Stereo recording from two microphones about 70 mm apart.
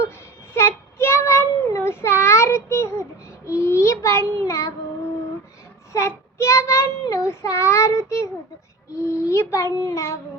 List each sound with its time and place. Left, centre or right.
0.5 s child singing: left
5.9 s child singing: left